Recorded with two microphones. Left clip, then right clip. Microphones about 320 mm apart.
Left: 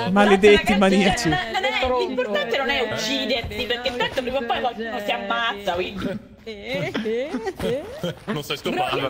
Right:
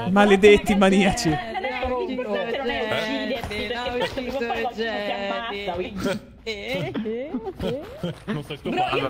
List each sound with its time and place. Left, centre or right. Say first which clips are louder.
0.1 s a man's voice: even; centre
1.3 s a sound: left 4 dB; left
3.1 s music: left 3 dB; left
8.0 s speech: left 3 dB; centre